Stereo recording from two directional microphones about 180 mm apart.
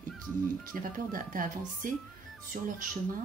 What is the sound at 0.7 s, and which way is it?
Speech, 50° right (ahead or behind).